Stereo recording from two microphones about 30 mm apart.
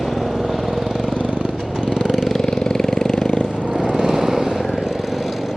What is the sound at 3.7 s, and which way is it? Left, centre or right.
Lawn mower, right.